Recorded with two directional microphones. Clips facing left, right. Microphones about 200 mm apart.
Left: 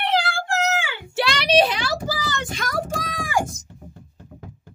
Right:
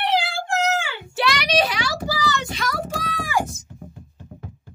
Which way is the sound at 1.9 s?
50° left (ahead or behind).